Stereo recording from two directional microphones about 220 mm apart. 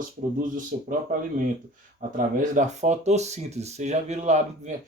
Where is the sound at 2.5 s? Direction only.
35° right (ahead or behind).